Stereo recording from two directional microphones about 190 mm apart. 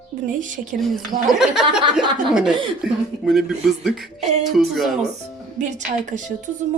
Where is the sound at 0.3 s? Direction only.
40° right (ahead or behind).